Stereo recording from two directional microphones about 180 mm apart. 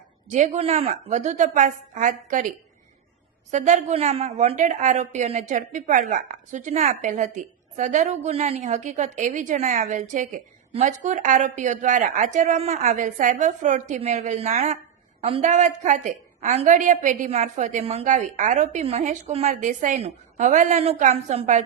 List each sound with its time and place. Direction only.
0.3 s a woman's voice: 40° right (ahead or behind)
3.5 s a woman's voice: 40° right (ahead or behind)